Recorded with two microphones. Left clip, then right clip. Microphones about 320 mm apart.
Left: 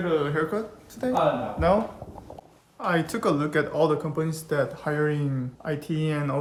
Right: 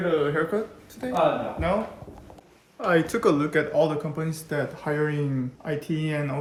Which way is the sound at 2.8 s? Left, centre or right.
Centre.